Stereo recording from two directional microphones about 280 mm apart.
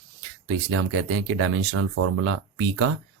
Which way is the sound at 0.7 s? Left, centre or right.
Right.